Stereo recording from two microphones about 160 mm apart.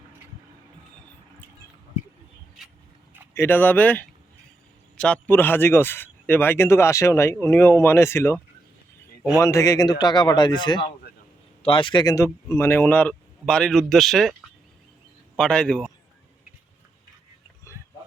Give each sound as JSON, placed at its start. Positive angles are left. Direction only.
{"t": 3.3, "sound": "speech", "side_deg": 15}
{"t": 9.4, "sound": "speech", "side_deg": 20}
{"t": 15.4, "sound": "speech", "side_deg": 5}